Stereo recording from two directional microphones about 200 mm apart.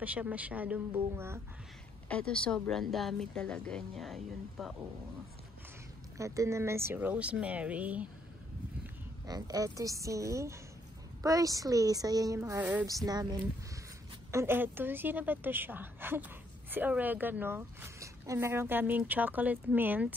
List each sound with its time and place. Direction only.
0.0 s a woman's voice: 5° right (ahead or behind)
2.0 s speech: 5° left (ahead or behind)
6.1 s a woman's voice: 15° right (ahead or behind)
9.2 s a woman's voice: 20° right (ahead or behind)